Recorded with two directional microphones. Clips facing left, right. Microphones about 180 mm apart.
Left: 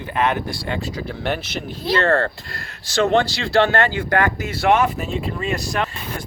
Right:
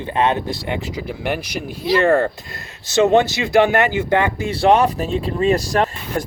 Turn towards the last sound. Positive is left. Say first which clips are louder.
# right 5 dB
turn(degrees=-35)  # may be behind; listen again after turning